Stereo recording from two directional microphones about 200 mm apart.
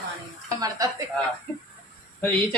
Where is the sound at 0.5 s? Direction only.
20° right (ahead or behind).